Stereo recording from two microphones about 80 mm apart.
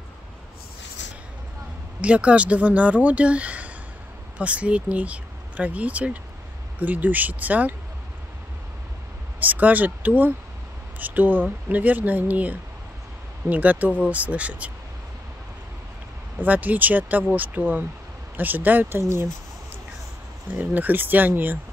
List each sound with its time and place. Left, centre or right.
2.0 s speech: centre
9.4 s speech: right
16.3 s speech: right
20.5 s speech: right